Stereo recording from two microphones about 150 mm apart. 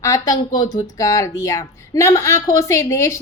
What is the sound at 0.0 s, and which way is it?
Speech, 25° left (ahead or behind).